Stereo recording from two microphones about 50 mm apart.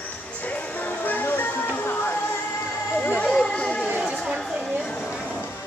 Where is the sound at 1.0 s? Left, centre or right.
Left.